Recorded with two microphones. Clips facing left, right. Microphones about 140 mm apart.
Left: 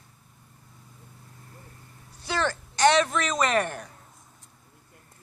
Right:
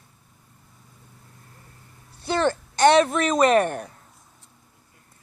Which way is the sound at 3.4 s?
45° right (ahead or behind).